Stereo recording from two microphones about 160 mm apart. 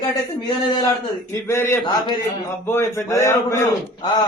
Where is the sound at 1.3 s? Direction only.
15° left (ahead or behind).